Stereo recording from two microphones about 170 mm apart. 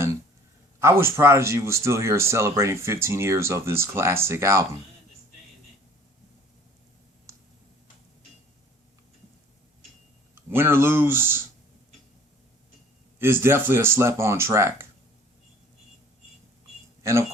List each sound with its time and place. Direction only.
0.8 s speech: 15° right (ahead or behind)
10.3 s speech: 15° right (ahead or behind)
13.1 s speech: 15° right (ahead or behind)
17.0 s speech: 15° right (ahead or behind)